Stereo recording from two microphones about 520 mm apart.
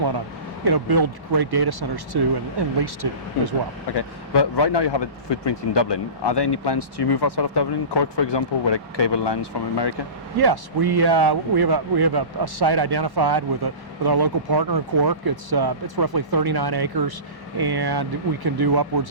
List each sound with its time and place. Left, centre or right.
0.6 s speech: right
3.9 s speech: left
10.3 s speech: right